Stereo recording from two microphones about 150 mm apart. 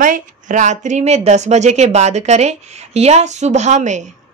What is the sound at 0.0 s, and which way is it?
Speech, 60° right (ahead or behind).